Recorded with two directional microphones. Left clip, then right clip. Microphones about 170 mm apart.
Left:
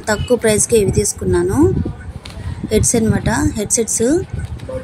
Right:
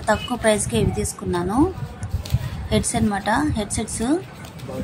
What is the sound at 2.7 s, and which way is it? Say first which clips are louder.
A woman's voice: left 6 dB; 5° left (ahead or behind).